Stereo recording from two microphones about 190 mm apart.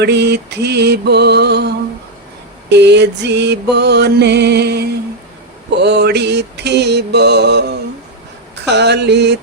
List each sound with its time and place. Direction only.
0.0 s music: 60° right (ahead or behind)